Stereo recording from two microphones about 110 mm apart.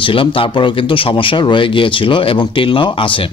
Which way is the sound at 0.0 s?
55° left (ahead or behind).